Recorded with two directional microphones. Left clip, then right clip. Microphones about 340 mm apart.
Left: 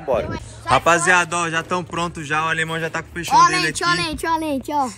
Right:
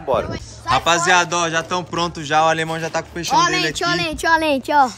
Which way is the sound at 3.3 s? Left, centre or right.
Centre.